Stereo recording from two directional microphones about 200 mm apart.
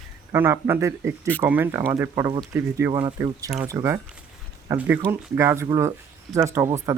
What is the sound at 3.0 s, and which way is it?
Speech, 25° right (ahead or behind).